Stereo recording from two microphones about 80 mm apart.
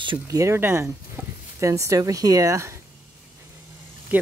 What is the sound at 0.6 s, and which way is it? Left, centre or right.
Speech, right.